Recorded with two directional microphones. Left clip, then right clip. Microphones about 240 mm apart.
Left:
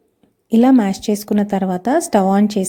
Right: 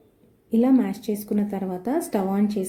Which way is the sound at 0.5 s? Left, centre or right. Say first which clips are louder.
Left 7 dB; left.